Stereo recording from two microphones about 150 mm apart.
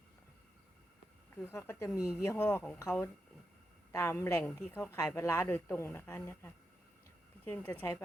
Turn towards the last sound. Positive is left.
turn(degrees=15)  # may be behind; listen again after turning